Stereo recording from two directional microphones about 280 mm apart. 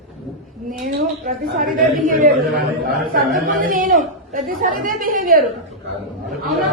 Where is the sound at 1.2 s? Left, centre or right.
Right.